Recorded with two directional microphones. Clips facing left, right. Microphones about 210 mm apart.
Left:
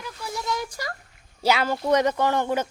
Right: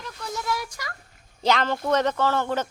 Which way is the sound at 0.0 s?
5° left (ahead or behind).